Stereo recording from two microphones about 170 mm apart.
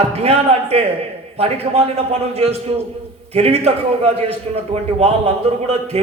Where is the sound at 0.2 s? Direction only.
35° right (ahead or behind).